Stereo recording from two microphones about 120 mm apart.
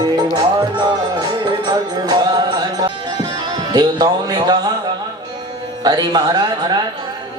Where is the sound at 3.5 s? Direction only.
35° right (ahead or behind).